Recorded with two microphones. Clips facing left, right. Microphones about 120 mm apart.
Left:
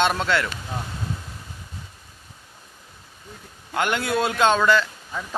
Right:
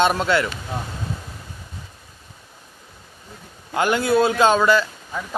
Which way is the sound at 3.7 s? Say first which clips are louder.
Right 5 dB; 5° right (ahead or behind).